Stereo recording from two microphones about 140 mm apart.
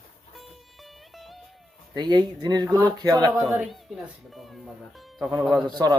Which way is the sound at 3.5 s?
Centre (ahead or behind).